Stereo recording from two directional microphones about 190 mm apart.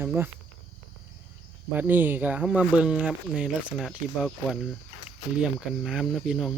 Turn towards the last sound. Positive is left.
turn(degrees=0)  # may be behind; listen again after turning